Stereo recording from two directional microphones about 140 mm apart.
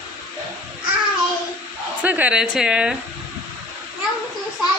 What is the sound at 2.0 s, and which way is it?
Speech, 10° right (ahead or behind).